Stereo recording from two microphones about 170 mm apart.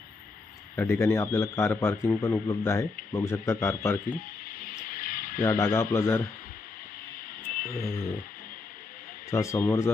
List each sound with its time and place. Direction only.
0.8 s speech: 15° left (ahead or behind)
4.6 s vehicle: 55° left (ahead or behind)
5.4 s speech: 15° left (ahead or behind)
7.6 s speech: 55° left (ahead or behind)
9.3 s speech: 15° left (ahead or behind)